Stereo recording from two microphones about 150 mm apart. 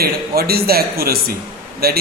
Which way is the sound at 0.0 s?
90° right.